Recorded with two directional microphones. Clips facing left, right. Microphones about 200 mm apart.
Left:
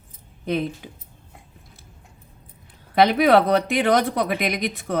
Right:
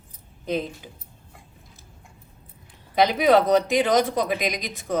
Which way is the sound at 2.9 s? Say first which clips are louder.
Left 2 dB; 60° left (ahead or behind).